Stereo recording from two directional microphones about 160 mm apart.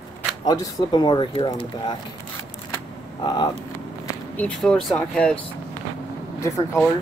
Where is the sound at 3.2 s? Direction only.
25° left (ahead or behind).